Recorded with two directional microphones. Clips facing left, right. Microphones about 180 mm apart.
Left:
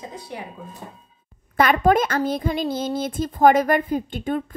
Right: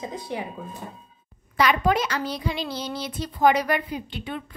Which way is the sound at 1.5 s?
50° left (ahead or behind).